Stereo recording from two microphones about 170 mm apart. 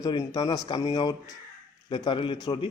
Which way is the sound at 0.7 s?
35° left (ahead or behind).